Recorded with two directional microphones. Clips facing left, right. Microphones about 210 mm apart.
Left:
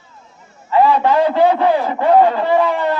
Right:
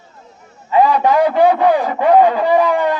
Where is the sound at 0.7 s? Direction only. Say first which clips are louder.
Even; 15° right (ahead or behind).